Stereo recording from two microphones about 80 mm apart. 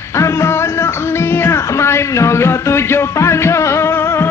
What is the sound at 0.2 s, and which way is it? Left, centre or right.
Music, left.